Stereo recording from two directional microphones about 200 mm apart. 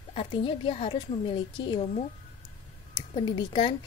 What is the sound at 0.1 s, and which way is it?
A woman's voice, 25° left (ahead or behind).